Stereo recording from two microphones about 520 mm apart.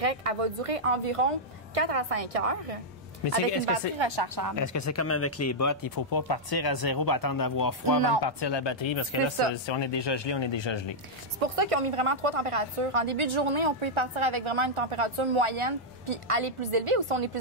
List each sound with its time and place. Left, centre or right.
0.0 s speech: right
1.8 s speech: right
3.6 s a woman's voice: right
4.6 s speech: left
11.3 s a woman's voice: right